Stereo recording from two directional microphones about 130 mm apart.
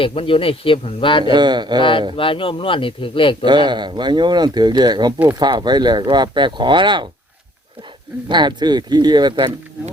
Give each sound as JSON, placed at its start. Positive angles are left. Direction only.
{"t": 0.0, "sound": "speech", "side_deg": 45}
{"t": 1.3, "sound": "speech", "side_deg": -35}
{"t": 1.8, "sound": "speech", "side_deg": 40}
{"t": 3.4, "sound": "speech", "side_deg": -35}
{"t": 8.3, "sound": "speech", "side_deg": -35}